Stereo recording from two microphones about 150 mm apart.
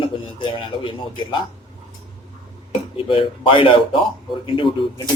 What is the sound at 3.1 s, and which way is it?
Speech, 35° left (ahead or behind).